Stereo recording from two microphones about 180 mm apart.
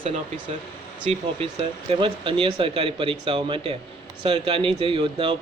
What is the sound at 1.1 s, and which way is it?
Speech, 35° right (ahead or behind).